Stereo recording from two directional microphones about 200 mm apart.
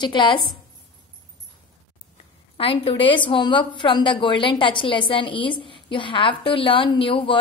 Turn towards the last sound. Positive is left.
turn(degrees=25)  # may be behind; listen again after turning